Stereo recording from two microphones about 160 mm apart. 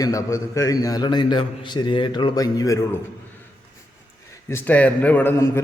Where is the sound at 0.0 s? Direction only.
20° left (ahead or behind).